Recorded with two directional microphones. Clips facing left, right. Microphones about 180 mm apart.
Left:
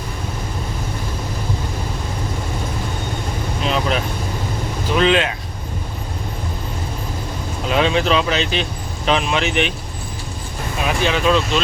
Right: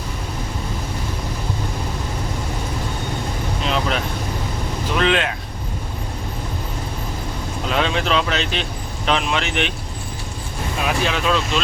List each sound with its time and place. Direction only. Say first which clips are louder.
3.6 s vehicle: left 2 dB; centre (ahead or behind)
4.9 s speech: left 3 dB; centre (ahead or behind)
7.7 s speech: left 4 dB; centre (ahead or behind)
10.8 s speech: left 3 dB; centre (ahead or behind)